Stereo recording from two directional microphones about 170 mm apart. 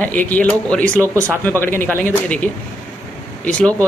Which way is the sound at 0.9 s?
15° right (ahead or behind).